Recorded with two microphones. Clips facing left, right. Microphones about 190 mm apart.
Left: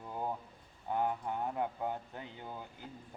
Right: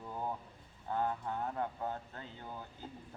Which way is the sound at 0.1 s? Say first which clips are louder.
Left 2 dB; 15° left (ahead or behind).